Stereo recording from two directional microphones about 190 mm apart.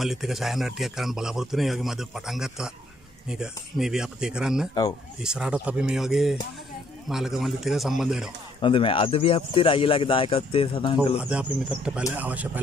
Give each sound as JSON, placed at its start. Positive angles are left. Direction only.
{"t": 0.0, "sound": "a man's voice", "side_deg": 0}
{"t": 8.5, "sound": "speech", "side_deg": 25}
{"t": 11.1, "sound": "a man's voice", "side_deg": -5}